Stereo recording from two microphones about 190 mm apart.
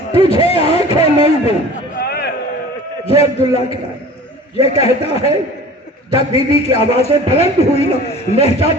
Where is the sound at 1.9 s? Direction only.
55° left (ahead or behind).